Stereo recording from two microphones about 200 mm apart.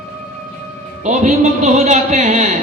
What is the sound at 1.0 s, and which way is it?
A man's voice, 35° right (ahead or behind).